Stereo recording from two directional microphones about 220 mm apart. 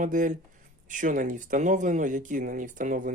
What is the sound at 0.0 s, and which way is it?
Speech, 35° right (ahead or behind).